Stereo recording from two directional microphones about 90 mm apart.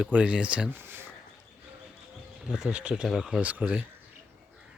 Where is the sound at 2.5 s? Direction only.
10° right (ahead or behind).